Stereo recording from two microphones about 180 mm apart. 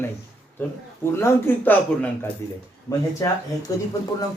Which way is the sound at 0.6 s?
15° left (ahead or behind).